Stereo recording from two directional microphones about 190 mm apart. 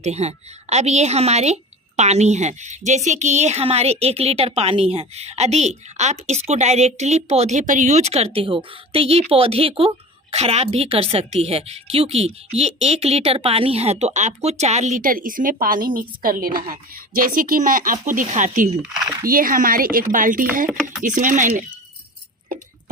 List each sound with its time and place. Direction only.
0.0 s a woman's voice: 35° right (ahead or behind)